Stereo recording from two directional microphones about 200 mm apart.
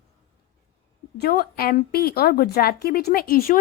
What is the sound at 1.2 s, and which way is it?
A woman's voice, 50° left (ahead or behind).